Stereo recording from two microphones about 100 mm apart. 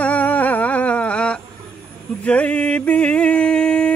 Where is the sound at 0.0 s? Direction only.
15° left (ahead or behind).